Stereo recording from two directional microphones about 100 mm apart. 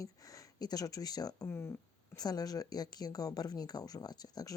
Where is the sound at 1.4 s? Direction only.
25° left (ahead or behind).